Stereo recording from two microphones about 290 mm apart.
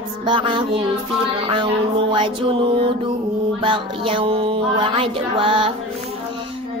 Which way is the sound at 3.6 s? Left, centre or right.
Centre.